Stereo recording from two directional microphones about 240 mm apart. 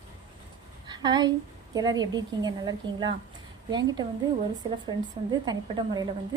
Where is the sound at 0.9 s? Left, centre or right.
Centre.